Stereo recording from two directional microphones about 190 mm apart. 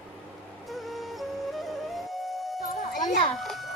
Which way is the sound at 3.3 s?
Centre (ahead or behind).